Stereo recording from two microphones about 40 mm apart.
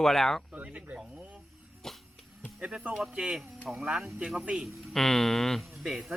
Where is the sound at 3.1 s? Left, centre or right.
Right.